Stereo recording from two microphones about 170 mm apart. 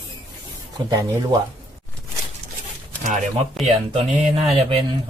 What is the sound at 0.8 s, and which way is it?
Speech, 20° right (ahead or behind).